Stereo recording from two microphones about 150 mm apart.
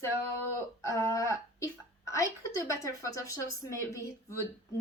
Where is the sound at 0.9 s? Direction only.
20° left (ahead or behind).